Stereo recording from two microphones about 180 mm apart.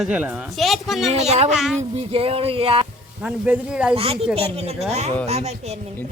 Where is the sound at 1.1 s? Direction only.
35° right (ahead or behind).